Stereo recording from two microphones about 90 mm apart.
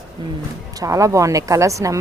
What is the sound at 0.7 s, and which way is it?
A woman's voice, 40° right (ahead or behind).